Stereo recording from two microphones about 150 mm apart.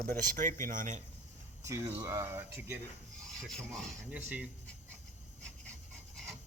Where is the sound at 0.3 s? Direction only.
60° right (ahead or behind).